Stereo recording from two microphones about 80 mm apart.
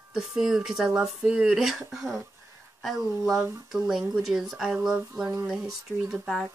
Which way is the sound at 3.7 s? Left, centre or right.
Centre.